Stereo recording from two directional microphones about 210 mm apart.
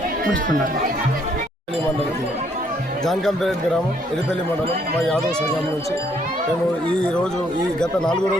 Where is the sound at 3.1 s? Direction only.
Centre (ahead or behind).